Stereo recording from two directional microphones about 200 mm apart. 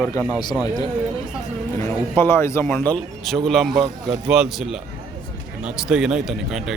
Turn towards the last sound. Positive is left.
turn(degrees=0)  # may be behind; listen again after turning